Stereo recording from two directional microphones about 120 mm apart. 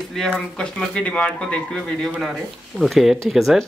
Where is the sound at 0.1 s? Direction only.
5° left (ahead or behind).